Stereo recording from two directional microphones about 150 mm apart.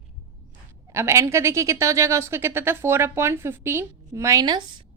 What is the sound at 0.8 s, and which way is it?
Speech, 20° right (ahead or behind).